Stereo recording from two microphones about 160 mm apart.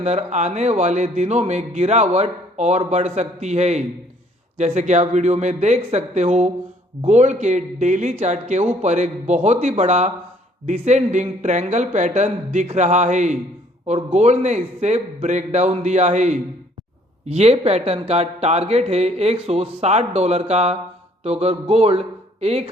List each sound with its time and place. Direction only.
0.0 s speech: 45° right (ahead or behind)